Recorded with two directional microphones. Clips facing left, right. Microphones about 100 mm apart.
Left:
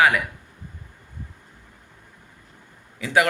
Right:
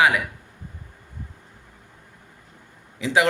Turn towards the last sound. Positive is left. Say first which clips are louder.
# right 5 dB
turn(degrees=-20)  # may be behind; listen again after turning